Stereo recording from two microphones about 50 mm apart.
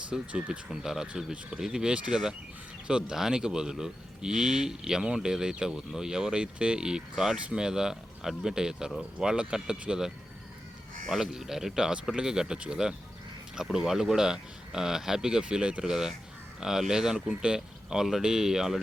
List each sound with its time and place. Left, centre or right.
0.1 s speech: right
0.7 s speech: centre
11.1 s speech: centre